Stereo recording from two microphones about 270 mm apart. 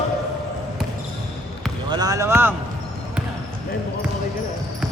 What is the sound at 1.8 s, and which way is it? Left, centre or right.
Speech, centre.